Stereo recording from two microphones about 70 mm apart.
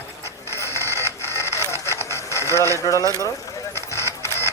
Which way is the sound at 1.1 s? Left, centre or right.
Left.